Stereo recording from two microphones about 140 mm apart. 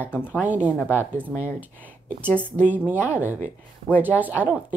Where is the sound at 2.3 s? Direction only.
10° left (ahead or behind).